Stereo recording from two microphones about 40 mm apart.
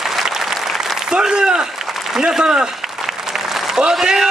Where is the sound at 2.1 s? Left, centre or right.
Centre.